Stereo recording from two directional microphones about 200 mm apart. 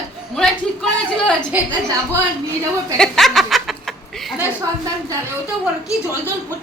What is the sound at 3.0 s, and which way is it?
Snicker, centre (ahead or behind).